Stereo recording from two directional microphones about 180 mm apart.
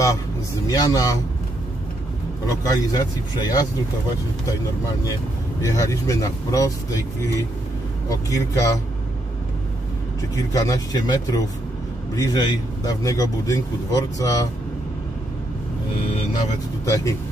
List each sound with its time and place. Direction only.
0.7 s speech: 20° left (ahead or behind)
2.6 s speech: 20° left (ahead or behind)
5.6 s speech: 15° left (ahead or behind)
10.3 s speech: 20° left (ahead or behind)
16.8 s speech: 15° left (ahead or behind)